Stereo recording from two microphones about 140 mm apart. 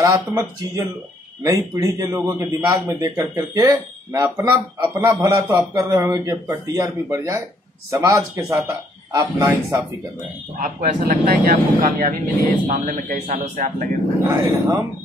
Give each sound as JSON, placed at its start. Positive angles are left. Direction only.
{"t": 0.0, "sound": "a man's voice", "side_deg": -20}
{"t": 10.6, "sound": "speech", "side_deg": -70}
{"t": 12.6, "sound": "speech", "side_deg": -70}
{"t": 14.2, "sound": "a man's voice", "side_deg": -20}